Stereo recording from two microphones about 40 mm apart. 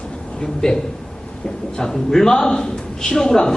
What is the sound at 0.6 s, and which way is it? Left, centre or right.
A man's voice, centre.